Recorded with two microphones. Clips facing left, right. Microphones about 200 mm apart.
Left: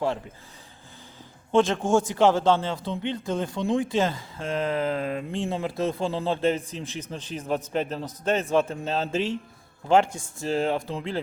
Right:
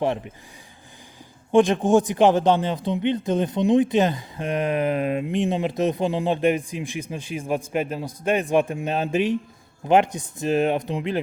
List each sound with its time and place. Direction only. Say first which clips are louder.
1.5 s speech: right 4 dB; 15° right (ahead or behind)